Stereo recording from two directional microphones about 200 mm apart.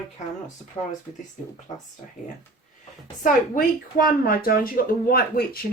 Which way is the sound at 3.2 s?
45° left (ahead or behind).